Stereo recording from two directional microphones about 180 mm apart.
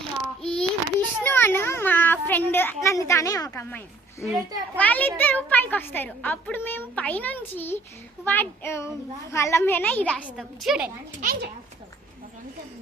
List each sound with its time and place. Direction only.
0.4 s a sound: 5° left (ahead or behind)
4.8 s a child's voice: 10° left (ahead or behind)
10.2 s a woman's voice: 5° right (ahead or behind)
11.2 s a child's voice: 50° right (ahead or behind)